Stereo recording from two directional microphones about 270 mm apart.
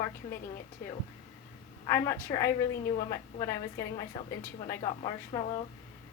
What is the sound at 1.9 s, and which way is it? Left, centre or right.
A woman's voice, centre.